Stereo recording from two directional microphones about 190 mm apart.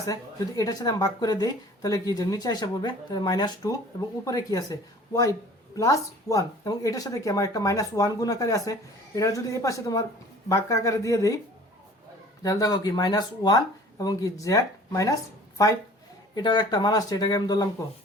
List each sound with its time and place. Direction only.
0.0 s a woman's voice: 20° left (ahead or behind)
12.4 s a woman's voice: 20° left (ahead or behind)